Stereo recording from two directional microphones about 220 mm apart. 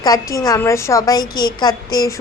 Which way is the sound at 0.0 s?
15° left (ahead or behind).